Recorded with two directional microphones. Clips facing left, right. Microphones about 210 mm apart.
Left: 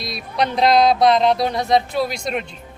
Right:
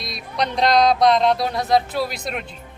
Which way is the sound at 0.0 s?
5° left (ahead or behind).